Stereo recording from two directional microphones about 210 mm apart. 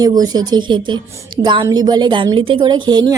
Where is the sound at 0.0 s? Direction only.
20° right (ahead or behind).